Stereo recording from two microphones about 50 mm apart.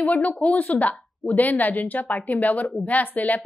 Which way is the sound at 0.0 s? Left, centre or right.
Left.